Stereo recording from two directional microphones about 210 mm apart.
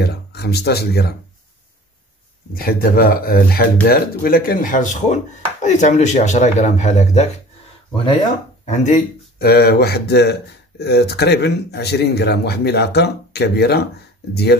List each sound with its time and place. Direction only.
0.0 s speech: 50° left (ahead or behind)
2.5 s speech: 45° left (ahead or behind)
8.6 s speech: 35° left (ahead or behind); by 14.6 s 50° left (ahead or behind)